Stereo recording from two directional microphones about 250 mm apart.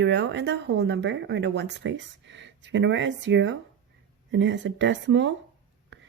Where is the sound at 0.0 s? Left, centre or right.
Right.